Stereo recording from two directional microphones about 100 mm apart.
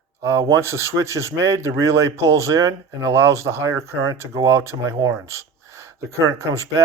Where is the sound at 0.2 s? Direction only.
30° right (ahead or behind).